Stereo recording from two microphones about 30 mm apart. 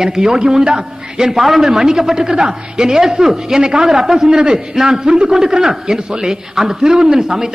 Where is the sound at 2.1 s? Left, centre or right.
Right.